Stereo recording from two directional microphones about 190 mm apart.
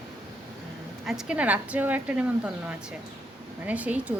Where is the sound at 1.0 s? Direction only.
5° right (ahead or behind).